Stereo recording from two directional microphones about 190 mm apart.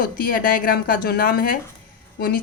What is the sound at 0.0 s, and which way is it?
A woman's voice, 50° left (ahead or behind).